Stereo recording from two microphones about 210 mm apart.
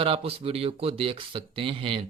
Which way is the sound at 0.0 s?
25° right (ahead or behind).